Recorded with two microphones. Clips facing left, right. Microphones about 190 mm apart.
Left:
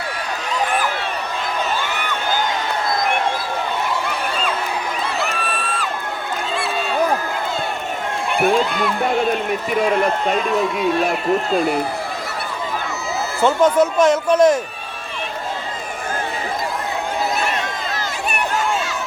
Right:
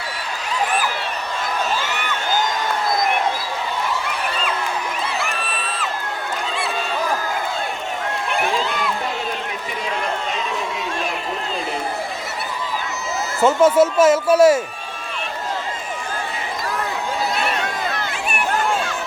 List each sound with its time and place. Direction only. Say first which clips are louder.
9.8 s a man's voice: left 6 dB; 55° left (ahead or behind)
13.4 s speech: right 1 dB; 5° right (ahead or behind)